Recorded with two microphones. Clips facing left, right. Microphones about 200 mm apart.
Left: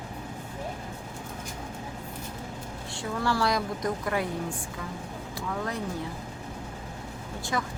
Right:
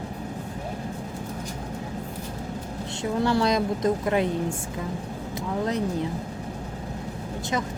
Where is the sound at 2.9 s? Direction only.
20° right (ahead or behind).